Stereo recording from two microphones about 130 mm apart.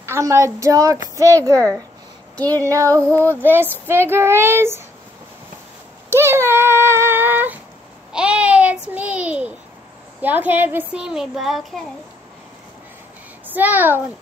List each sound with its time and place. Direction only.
0.0 s a woman's voice: 20° right (ahead or behind)
6.0 s a sound: 20° right (ahead or behind)
8.1 s babbling: 5° right (ahead or behind)
10.2 s a child's voice: 15° right (ahead or behind)
13.5 s a child's voice: 15° right (ahead or behind)